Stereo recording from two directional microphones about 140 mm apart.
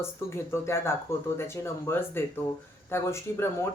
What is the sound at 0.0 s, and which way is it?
A woman's voice, 20° left (ahead or behind).